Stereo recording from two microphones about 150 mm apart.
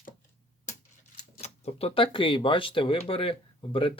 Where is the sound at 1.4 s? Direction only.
45° left (ahead or behind).